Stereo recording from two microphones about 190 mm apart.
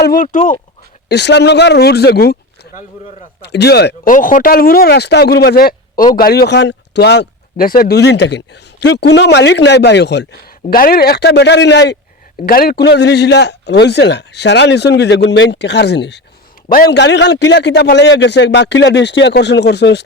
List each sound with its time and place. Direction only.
0.0 s speech: 45° left (ahead or behind)
1.0 s a man's voice: 60° left (ahead or behind)
3.4 s a man's voice: 60° left (ahead or behind)
12.5 s a man's voice: 50° left (ahead or behind)
16.6 s a man's voice: 50° left (ahead or behind)